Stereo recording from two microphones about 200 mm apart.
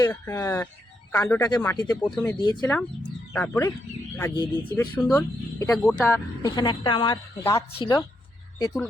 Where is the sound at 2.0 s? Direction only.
5° left (ahead or behind).